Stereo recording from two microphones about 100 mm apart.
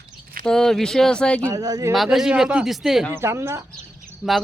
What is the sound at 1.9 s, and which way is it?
Speech, centre (ahead or behind).